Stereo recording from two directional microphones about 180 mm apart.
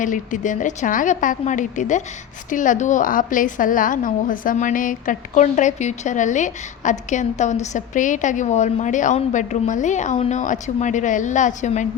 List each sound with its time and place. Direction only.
0.0 s a woman's voice: 45° left (ahead or behind)